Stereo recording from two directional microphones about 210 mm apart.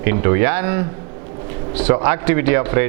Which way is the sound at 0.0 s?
15° right (ahead or behind).